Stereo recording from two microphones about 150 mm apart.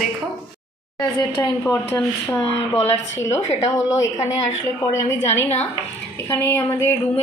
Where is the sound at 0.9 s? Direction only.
30° left (ahead or behind).